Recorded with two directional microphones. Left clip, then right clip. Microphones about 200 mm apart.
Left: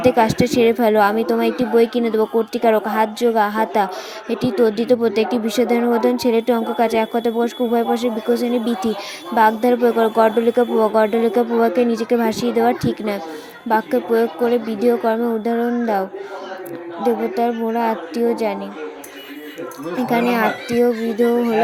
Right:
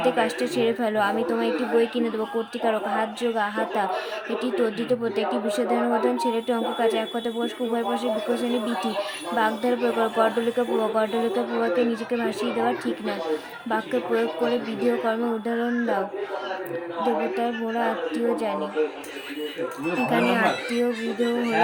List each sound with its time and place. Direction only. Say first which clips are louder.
0.0 s speech: left 8 dB; 30° left (ahead or behind)
20.1 s speech: left 5 dB; 30° left (ahead or behind)